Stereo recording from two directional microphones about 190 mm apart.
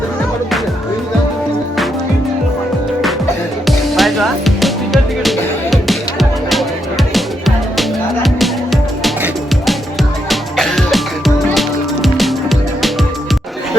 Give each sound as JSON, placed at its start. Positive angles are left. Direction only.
{"t": 3.7, "sound": "music", "side_deg": 0}